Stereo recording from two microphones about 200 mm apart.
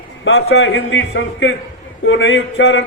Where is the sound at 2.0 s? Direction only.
70° left (ahead or behind).